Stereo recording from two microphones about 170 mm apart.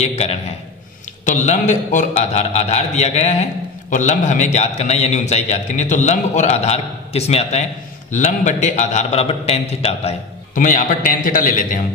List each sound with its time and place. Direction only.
0.0 s a man's voice: 40° left (ahead or behind)
10.5 s a man's voice: 50° left (ahead or behind)